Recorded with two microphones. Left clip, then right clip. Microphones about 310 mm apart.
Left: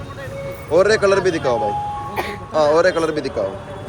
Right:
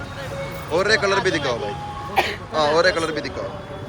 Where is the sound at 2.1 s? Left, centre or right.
Centre.